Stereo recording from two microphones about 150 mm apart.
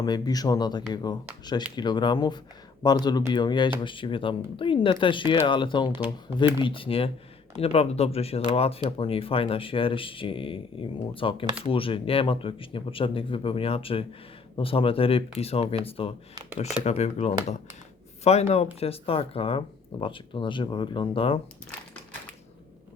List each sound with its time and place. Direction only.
0.0 s speech: 25° left (ahead or behind)